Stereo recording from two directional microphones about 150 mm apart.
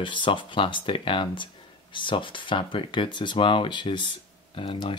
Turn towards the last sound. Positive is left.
turn(degrees=35)  # may be behind; listen again after turning